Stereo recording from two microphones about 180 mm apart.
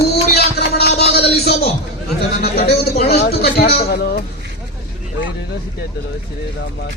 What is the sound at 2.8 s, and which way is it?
A man's voice, 60° left (ahead or behind).